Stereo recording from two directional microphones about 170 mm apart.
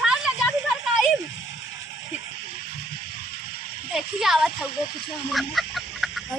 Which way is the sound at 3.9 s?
Centre (ahead or behind).